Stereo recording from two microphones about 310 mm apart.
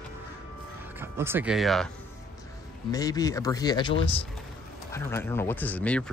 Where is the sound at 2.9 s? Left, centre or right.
Centre.